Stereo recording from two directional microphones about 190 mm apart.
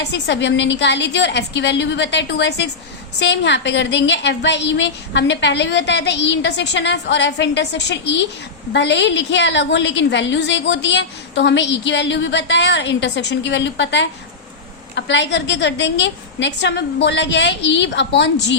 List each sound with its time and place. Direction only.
0.0 s a woman's voice: 70° left (ahead or behind)